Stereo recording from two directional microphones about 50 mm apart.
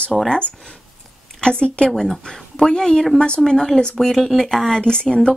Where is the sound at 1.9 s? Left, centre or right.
Centre.